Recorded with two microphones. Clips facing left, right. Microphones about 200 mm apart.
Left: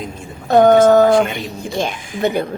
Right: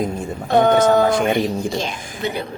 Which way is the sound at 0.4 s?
45° left (ahead or behind).